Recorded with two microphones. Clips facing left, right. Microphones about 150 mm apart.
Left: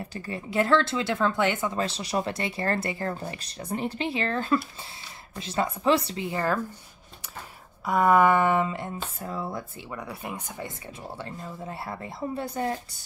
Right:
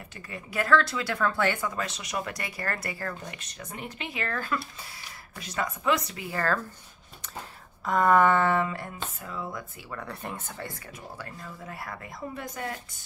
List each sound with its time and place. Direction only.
0.0 s speech: 35° left (ahead or behind); by 6.6 s 15° left (ahead or behind)
7.8 s speech: 10° left (ahead or behind)
9.2 s speech: 35° left (ahead or behind)
9.8 s speech: 10° left (ahead or behind); by 12.8 s 30° left (ahead or behind)